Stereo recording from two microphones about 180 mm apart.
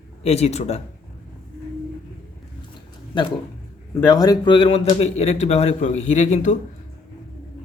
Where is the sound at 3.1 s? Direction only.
25° left (ahead or behind); by 6.5 s 40° left (ahead or behind).